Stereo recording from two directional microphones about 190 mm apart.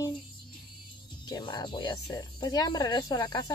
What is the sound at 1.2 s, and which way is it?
Speech, 20° left (ahead or behind).